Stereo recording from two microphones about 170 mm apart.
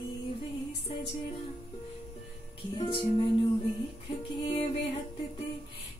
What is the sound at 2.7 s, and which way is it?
Female singing, 30° left (ahead or behind).